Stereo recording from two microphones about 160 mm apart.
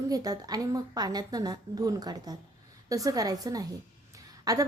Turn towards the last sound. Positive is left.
turn(degrees=-20)  # may be behind; listen again after turning